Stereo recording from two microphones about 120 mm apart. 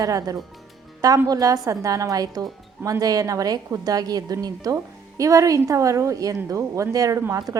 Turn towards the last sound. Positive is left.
turn(degrees=-30)  # may be behind; listen again after turning